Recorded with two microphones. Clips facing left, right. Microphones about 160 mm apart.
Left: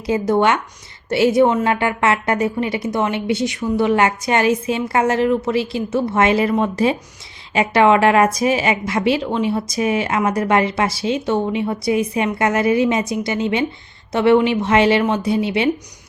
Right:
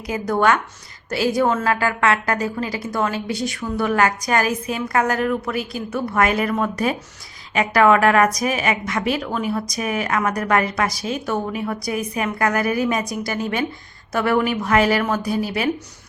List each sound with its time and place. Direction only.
0.1 s a woman's voice: 25° left (ahead or behind)